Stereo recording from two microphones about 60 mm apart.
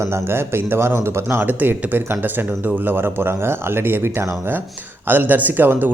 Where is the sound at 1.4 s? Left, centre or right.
Right.